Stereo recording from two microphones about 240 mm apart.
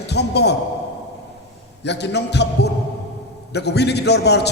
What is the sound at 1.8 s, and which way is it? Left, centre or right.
A man's voice, left.